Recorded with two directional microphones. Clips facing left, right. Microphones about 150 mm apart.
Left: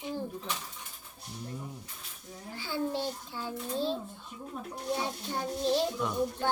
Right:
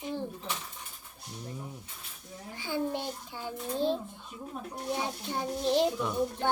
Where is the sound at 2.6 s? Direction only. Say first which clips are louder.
Even; 15° right (ahead or behind).